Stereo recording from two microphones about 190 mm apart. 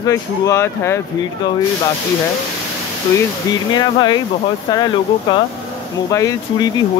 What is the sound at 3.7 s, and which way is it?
Speech, 20° left (ahead or behind).